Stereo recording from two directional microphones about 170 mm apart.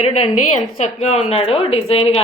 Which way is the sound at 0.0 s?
40° left (ahead or behind).